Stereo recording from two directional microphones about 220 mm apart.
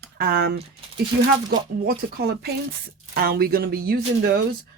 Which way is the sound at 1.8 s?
45° right (ahead or behind).